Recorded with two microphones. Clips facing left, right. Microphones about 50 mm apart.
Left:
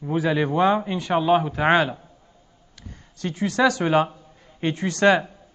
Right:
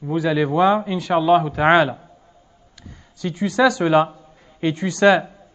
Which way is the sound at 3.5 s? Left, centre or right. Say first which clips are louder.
Right 3 dB; centre.